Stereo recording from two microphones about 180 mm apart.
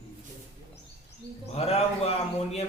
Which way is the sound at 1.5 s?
35° left (ahead or behind).